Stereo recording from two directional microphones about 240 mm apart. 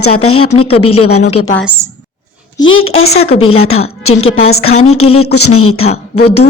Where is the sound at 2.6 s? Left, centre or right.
Left.